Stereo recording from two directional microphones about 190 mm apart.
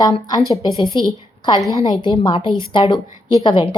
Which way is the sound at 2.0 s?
25° left (ahead or behind).